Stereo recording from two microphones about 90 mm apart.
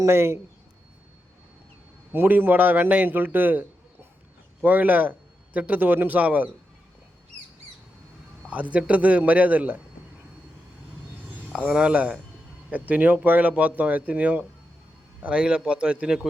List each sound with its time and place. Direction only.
0.0 s a man's voice: 25° right (ahead or behind)
2.1 s a man's voice: 25° right (ahead or behind)
8.4 s speech: 15° right (ahead or behind)
11.5 s speech: 10° right (ahead or behind)